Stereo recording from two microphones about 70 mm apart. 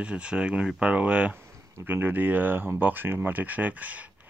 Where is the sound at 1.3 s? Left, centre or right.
Right.